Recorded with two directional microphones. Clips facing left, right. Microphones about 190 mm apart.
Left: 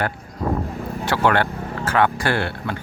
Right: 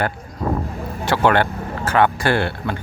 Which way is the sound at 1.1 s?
25° right (ahead or behind).